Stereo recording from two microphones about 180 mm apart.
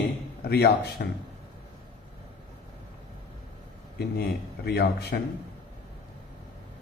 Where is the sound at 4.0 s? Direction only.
60° left (ahead or behind).